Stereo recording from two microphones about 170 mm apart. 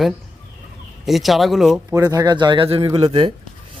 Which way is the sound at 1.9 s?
20° right (ahead or behind).